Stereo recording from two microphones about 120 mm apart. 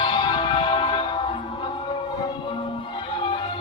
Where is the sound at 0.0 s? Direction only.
40° left (ahead or behind).